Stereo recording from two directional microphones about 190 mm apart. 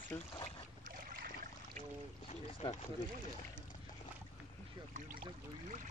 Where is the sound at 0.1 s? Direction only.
15° left (ahead or behind).